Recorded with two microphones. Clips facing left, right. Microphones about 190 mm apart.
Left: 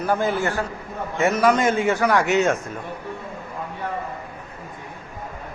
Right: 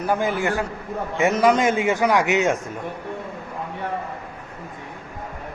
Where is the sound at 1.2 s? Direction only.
15° right (ahead or behind).